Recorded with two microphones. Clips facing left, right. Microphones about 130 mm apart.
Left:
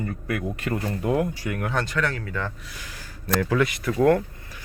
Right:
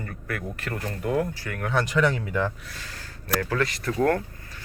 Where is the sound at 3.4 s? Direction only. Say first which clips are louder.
Left 5 dB; 10° left (ahead or behind).